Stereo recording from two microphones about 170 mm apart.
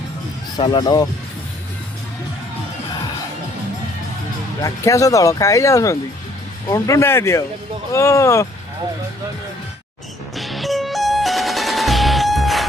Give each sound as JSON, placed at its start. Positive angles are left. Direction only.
{"t": 0.5, "sound": "speech", "side_deg": 25}
{"t": 4.6, "sound": "speech", "side_deg": 20}
{"t": 10.3, "sound": "music", "side_deg": 0}